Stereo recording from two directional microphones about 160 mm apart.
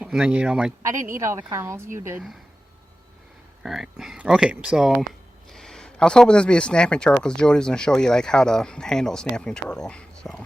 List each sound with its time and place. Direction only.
0.0 s speech: 5° right (ahead or behind)
1.2 s a woman's voice: 15° right (ahead or behind)
3.6 s speech: centre (ahead or behind)